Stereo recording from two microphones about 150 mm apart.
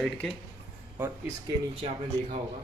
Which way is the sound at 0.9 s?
15° right (ahead or behind).